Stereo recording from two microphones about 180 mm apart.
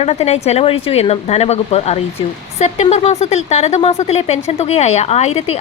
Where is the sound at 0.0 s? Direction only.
35° left (ahead or behind).